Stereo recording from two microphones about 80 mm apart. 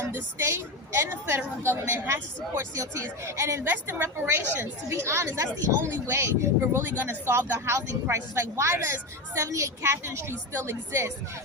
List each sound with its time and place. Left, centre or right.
0.1 s a woman's voice: right
3.7 s a woman's voice: right